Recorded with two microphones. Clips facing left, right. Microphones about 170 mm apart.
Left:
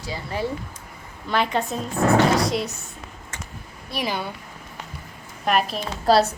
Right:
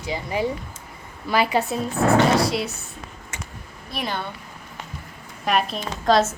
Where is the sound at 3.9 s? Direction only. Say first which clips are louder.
Left 1 dB; 5° left (ahead or behind).